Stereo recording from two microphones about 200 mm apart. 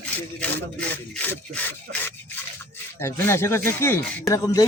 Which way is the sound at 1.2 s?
10° left (ahead or behind).